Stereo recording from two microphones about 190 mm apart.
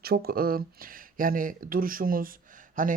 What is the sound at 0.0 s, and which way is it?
Speech, 55° right (ahead or behind).